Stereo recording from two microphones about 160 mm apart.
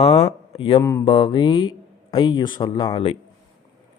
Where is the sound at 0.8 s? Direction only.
20° left (ahead or behind).